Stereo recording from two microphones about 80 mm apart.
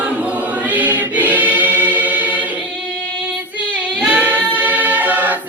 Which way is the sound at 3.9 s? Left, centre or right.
Centre.